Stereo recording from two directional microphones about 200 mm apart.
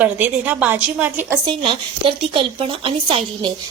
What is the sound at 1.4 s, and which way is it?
Speech, 25° right (ahead or behind).